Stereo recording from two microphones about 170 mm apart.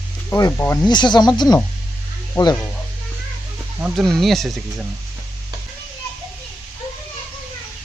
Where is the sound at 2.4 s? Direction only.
10° left (ahead or behind).